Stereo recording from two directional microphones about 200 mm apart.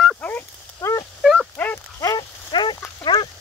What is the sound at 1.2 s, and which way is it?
Dog, 5° right (ahead or behind).